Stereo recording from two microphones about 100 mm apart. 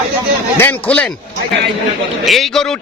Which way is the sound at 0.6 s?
20° left (ahead or behind).